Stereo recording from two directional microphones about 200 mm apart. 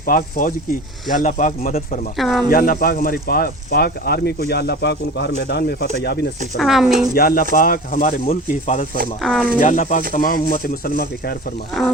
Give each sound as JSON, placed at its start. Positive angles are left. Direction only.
{"t": 0.0, "sound": "speech", "side_deg": 45}
{"t": 2.1, "sound": "speech", "side_deg": 0}
{"t": 2.5, "sound": "speech", "side_deg": 45}
{"t": 6.6, "sound": "speech", "side_deg": 0}
{"t": 7.1, "sound": "speech", "side_deg": 45}
{"t": 9.2, "sound": "speech", "side_deg": 0}
{"t": 9.6, "sound": "speech", "side_deg": 40}